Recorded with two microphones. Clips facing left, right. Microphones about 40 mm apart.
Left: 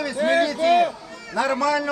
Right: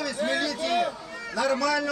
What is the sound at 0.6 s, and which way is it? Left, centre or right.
Speech, left.